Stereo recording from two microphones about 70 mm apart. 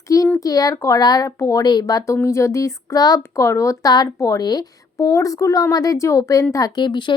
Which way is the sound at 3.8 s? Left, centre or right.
Left.